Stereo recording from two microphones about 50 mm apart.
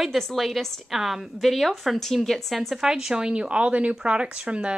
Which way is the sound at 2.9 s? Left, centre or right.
Centre.